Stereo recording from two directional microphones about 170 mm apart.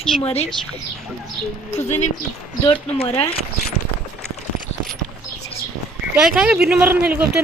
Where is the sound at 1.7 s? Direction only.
40° left (ahead or behind).